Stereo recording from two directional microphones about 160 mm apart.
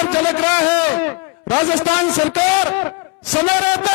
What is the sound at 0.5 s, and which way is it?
Speech, 10° left (ahead or behind).